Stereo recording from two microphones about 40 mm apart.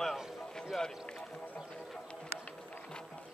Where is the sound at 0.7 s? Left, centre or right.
Centre.